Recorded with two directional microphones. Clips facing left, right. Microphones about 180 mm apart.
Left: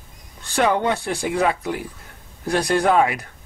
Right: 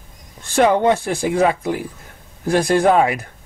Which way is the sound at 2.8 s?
30° right (ahead or behind).